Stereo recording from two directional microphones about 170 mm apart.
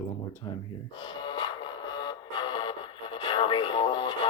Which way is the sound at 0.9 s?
30° left (ahead or behind).